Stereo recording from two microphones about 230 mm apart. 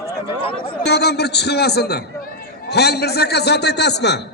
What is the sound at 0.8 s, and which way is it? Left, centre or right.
A man's voice, left.